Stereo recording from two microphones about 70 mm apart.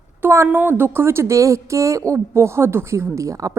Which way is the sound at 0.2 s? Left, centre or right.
Right.